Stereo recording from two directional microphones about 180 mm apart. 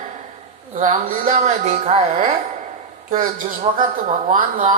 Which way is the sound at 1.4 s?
35° right (ahead or behind).